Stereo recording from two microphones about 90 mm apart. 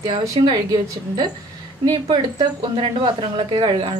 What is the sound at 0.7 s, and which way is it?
Speech, 50° right (ahead or behind).